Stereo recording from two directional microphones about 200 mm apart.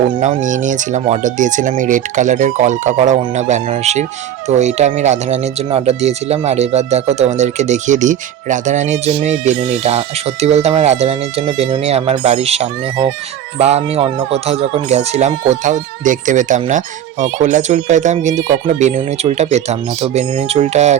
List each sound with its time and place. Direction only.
0.2 s speech: 40° right (ahead or behind)